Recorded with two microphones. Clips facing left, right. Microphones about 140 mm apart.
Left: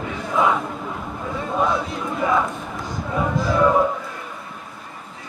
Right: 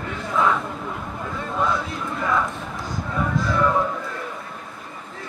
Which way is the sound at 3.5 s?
15° left (ahead or behind).